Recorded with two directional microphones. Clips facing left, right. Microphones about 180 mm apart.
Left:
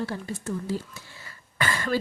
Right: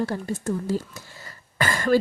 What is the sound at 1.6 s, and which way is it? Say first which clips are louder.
Cough: right 5 dB; 45° right (ahead or behind).